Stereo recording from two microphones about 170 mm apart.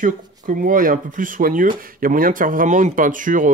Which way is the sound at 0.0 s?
50° right (ahead or behind).